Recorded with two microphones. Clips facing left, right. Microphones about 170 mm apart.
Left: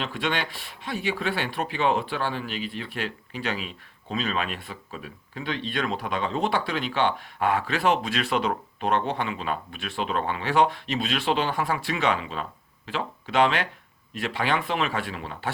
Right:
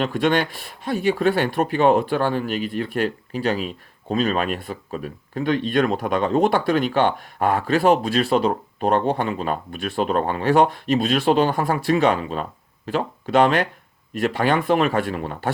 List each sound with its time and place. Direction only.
0.0 s speech: 45° right (ahead or behind)